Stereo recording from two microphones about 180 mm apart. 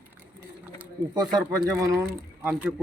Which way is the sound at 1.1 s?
25° right (ahead or behind).